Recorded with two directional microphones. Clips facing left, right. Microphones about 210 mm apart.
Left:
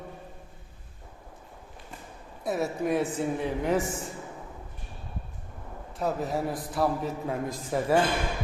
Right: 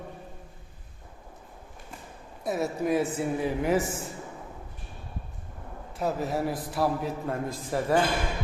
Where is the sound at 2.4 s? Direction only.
Centre (ahead or behind).